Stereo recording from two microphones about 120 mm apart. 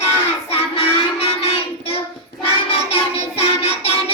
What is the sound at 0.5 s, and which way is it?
Child singing, 55° left (ahead or behind).